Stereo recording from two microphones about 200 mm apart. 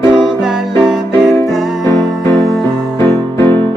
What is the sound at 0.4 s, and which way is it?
Music, centre (ahead or behind).